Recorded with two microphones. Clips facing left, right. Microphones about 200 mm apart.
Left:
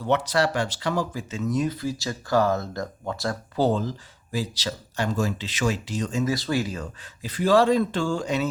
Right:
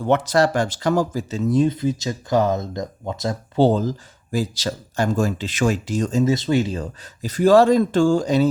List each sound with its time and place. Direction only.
0.0 s speech: 50° right (ahead or behind)
6.2 s speech: 25° right (ahead or behind)
7.2 s speech: 45° right (ahead or behind)